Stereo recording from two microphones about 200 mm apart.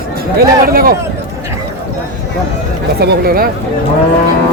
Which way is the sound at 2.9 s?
50° right (ahead or behind).